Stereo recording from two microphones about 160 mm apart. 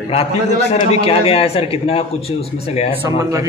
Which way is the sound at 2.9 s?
15° right (ahead or behind).